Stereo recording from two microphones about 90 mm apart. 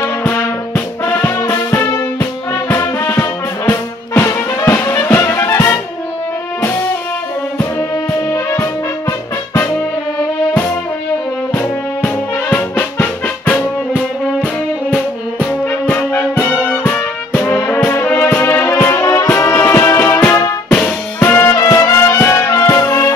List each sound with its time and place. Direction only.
0.0 s music: 25° left (ahead or behind)
8.1 s brass instrument: 30° left (ahead or behind)
11.5 s music: 20° left (ahead or behind)
17.6 s brass instrument: 30° left (ahead or behind)
18.8 s music: 25° left (ahead or behind)